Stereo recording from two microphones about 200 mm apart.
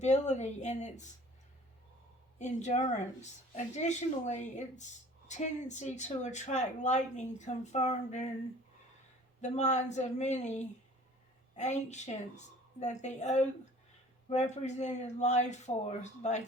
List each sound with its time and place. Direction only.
0.0 s speech: 35° left (ahead or behind)
2.4 s speech: 35° left (ahead or behind)
9.4 s speech: 35° left (ahead or behind)